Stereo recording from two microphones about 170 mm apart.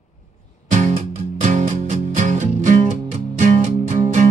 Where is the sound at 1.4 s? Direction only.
45° right (ahead or behind).